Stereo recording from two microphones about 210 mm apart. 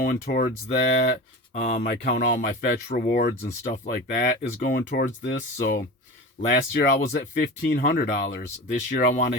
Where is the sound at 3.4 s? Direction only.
35° left (ahead or behind); by 5.9 s 50° left (ahead or behind).